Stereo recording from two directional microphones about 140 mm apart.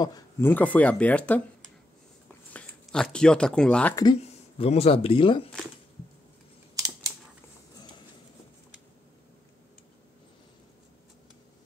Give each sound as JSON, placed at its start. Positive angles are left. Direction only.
{"t": 0.4, "sound": "speech", "side_deg": 15}
{"t": 2.5, "sound": "speech", "side_deg": 5}
{"t": 3.9, "sound": "speech", "side_deg": 30}
{"t": 4.2, "sound": "speech", "side_deg": 50}